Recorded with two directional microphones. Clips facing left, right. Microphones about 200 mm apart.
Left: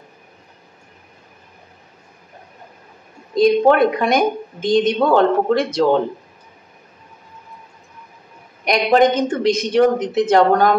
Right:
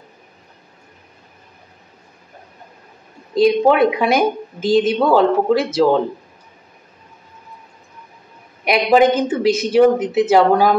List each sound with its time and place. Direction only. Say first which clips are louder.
3.3 s speech: even; centre (ahead or behind)
8.6 s speech: right 1 dB; 5° right (ahead or behind)